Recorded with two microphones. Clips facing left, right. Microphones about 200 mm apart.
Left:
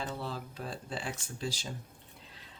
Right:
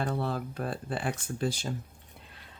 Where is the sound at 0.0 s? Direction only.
55° right (ahead or behind).